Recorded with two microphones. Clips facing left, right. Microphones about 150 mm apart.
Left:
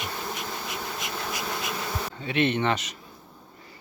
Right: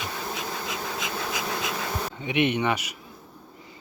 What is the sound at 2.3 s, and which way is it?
Speech, 15° right (ahead or behind).